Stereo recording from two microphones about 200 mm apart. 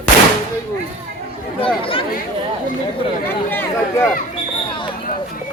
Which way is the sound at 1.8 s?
25° left (ahead or behind).